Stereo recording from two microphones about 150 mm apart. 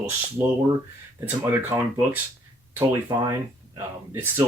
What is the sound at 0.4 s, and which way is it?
Speech, 15° right (ahead or behind).